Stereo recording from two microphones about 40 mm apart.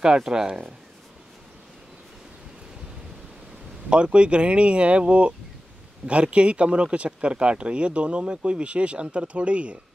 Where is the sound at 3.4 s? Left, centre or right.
Right.